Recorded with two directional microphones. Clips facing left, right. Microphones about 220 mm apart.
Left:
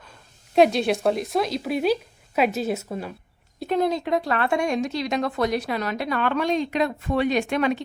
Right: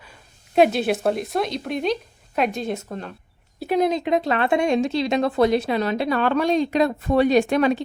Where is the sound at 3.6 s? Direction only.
15° right (ahead or behind); by 7.8 s 35° right (ahead or behind).